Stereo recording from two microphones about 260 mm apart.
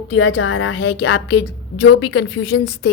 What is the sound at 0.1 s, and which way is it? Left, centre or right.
A woman's voice, left.